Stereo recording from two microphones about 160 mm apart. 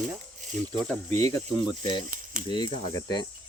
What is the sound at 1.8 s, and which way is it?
Speech, 55° right (ahead or behind).